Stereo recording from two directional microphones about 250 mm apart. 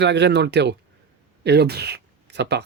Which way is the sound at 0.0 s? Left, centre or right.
Right.